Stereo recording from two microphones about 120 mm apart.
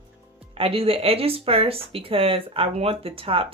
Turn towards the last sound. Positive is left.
turn(degrees=-50)  # may be behind; listen again after turning